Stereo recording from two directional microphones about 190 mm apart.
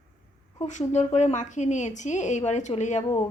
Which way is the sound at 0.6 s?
40° left (ahead or behind).